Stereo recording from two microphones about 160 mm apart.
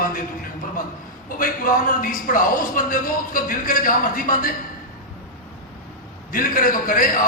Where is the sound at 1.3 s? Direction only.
60° left (ahead or behind).